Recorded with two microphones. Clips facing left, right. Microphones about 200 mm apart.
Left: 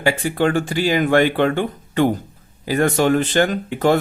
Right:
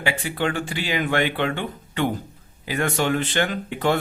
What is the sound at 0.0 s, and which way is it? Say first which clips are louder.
Speech: left 6 dB; 45° left (ahead or behind).